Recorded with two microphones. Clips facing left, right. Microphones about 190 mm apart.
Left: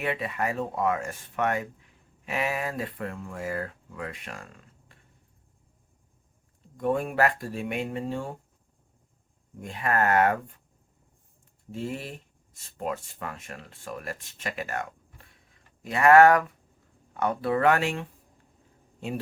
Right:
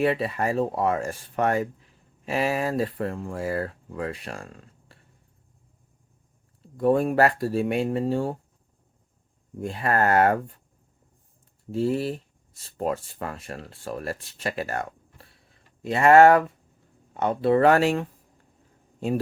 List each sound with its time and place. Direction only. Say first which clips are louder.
0.0 s speech: right 6 dB; 35° right (ahead or behind)
6.7 s speech: right 5 dB; 35° right (ahead or behind)
9.6 s speech: right 3 dB; 35° right (ahead or behind)
11.7 s a man's voice: right 9 dB; 35° right (ahead or behind)